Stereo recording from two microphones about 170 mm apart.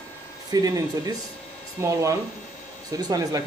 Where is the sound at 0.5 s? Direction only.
20° right (ahead or behind).